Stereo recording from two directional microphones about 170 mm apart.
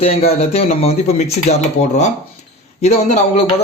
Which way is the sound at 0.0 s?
35° left (ahead or behind).